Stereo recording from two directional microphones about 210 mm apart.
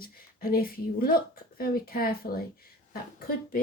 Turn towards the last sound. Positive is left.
turn(degrees=45)  # may be behind; listen again after turning